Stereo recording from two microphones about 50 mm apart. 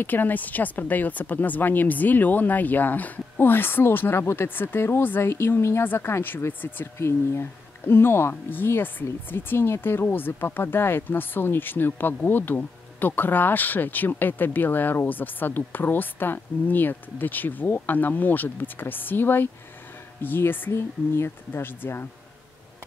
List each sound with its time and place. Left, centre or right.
0.0 s speech: left
5.9 s speech: left
7.0 s speech: left
20.7 s speech: left